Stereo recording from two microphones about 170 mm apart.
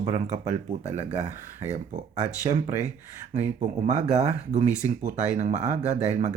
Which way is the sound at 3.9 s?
45° right (ahead or behind).